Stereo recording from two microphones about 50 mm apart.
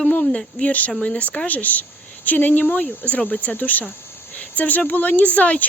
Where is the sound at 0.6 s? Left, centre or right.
Left.